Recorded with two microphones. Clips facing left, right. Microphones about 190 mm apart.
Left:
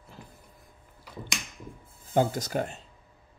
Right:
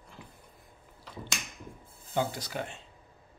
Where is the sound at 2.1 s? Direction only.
45° left (ahead or behind).